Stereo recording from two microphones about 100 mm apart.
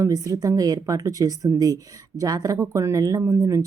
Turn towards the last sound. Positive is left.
turn(degrees=-35)  # may be behind; listen again after turning